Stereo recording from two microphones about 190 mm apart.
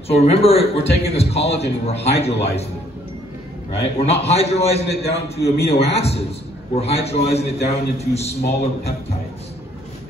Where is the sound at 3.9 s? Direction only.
35° left (ahead or behind).